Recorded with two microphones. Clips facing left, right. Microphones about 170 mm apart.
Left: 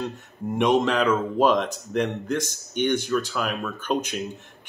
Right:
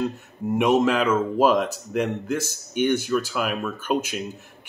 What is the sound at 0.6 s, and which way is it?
Speech, 5° right (ahead or behind).